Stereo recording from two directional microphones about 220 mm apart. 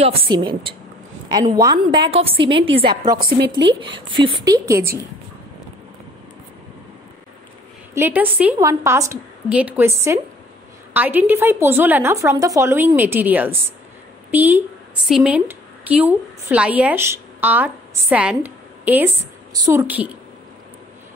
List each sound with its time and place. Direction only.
0.0 s a woman's voice: 25° right (ahead or behind)
3.2 s speech: 50° right (ahead or behind)
3.8 s a woman's voice: 20° right (ahead or behind)
7.9 s a woman's voice: 10° right (ahead or behind)